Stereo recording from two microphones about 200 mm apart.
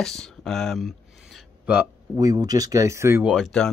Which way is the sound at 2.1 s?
20° right (ahead or behind).